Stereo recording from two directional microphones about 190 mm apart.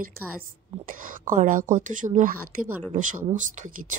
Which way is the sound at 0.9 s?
45° right (ahead or behind).